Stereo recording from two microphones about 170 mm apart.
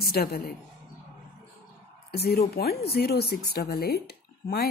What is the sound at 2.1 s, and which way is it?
Speech, 70° left (ahead or behind).